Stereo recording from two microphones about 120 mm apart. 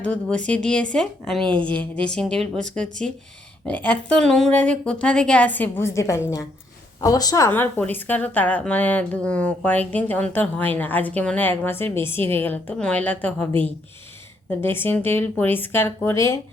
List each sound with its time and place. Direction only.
0.0 s a woman's voice: 10° left (ahead or behind)